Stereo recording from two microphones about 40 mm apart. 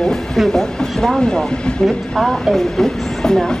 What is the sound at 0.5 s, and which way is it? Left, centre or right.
Speech, centre.